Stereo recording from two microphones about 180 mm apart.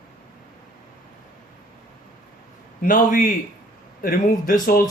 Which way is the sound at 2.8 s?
50° left (ahead or behind).